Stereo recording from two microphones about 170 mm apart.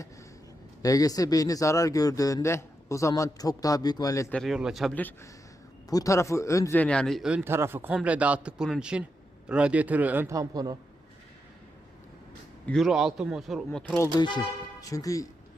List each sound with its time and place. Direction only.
0.8 s speech: 20° left (ahead or behind)
4.3 s speech: centre (ahead or behind)
4.9 s a man's voice: 10° left (ahead or behind); by 10.8 s 25° right (ahead or behind)
12.6 s speech: centre (ahead or behind)
14.2 s speech: 25° left (ahead or behind)